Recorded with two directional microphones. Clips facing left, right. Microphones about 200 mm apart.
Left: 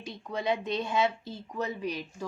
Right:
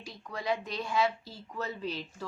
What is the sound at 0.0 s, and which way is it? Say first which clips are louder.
Speech: left 5 dB; 20° left (ahead or behind).